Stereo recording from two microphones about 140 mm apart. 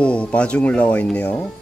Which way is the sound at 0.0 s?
10° left (ahead or behind).